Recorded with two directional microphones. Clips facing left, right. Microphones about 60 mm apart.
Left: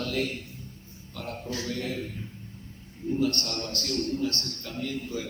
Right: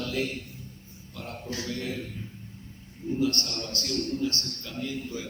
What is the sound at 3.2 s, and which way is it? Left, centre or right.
A man's voice, left.